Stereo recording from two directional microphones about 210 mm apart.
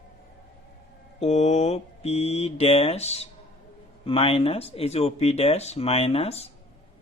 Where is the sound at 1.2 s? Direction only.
30° left (ahead or behind).